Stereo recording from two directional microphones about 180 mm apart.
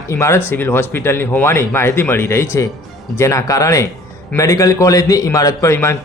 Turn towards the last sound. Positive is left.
turn(degrees=15)  # may be behind; listen again after turning